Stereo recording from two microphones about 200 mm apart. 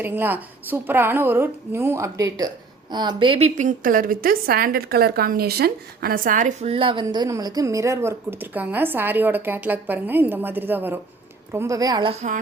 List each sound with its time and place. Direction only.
0.0 s a woman's voice: 10° right (ahead or behind); by 12.4 s 35° right (ahead or behind)